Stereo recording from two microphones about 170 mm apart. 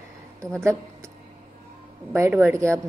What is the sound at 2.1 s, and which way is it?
Speech, 15° right (ahead or behind).